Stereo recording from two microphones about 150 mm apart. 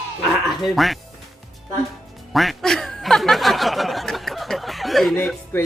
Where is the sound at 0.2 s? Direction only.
Centre (ahead or behind).